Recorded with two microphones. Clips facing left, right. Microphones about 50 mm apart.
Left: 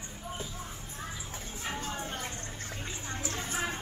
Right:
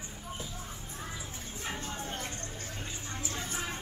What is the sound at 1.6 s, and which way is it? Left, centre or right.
Music, centre.